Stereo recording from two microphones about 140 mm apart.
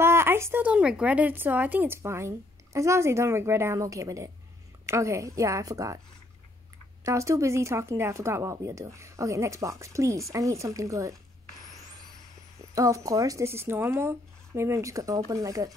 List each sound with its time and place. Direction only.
0.0 s speech: 20° right (ahead or behind)
7.0 s speech: 20° right (ahead or behind)
12.5 s speech: 20° right (ahead or behind)